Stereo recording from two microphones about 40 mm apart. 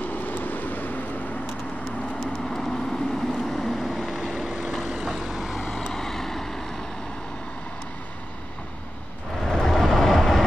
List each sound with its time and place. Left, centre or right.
0.0 s vehicle: left
2.1 s vehicle: centre
5.3 s vehicle: centre
9.4 s vehicle: centre